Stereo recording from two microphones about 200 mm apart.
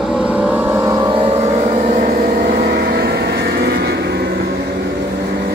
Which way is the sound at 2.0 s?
50° right (ahead or behind).